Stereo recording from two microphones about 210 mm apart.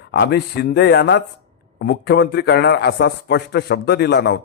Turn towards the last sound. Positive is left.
turn(degrees=55)  # may be behind; listen again after turning